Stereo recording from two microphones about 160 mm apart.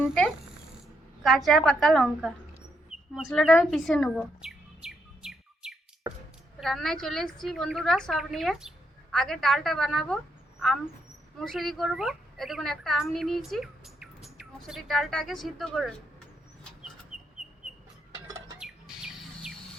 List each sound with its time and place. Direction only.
0.0 s insect: centre (ahead or behind)
1.5 s a woman's voice: centre (ahead or behind)
2.9 s a sound: 40° left (ahead or behind)
3.3 s chirp: centre (ahead or behind)
6.6 s a woman's voice: centre (ahead or behind)
11.3 s a woman's voice: centre (ahead or behind)
17.1 s bird: centre (ahead or behind)
18.3 s a sound: 20° right (ahead or behind)
18.6 s bird: 5° right (ahead or behind)